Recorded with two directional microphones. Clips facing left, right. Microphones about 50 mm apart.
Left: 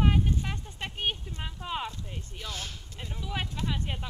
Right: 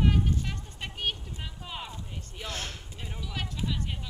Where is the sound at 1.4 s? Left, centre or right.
Centre.